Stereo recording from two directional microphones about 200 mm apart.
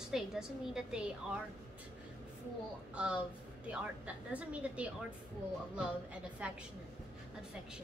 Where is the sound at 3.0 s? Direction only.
5° right (ahead or behind).